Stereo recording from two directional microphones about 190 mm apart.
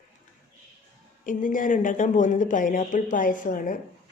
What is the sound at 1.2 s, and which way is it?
Speech, 45° left (ahead or behind).